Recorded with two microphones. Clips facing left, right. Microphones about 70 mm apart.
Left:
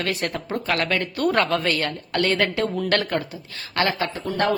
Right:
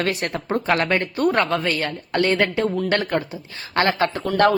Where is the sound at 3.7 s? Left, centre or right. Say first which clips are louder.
Right 4 dB; right.